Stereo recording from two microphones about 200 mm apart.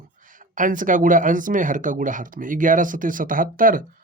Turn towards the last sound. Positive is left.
turn(degrees=-45)  # may be behind; listen again after turning